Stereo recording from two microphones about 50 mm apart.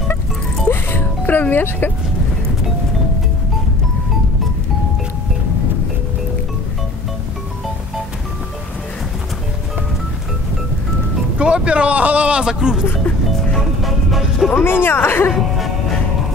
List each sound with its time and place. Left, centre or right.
0.7 s music: left
11.3 s speech: right
13.8 s music: centre
14.5 s speech: left
15.3 s music: centre